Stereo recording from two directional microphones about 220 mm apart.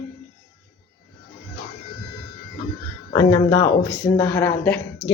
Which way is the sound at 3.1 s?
15° left (ahead or behind).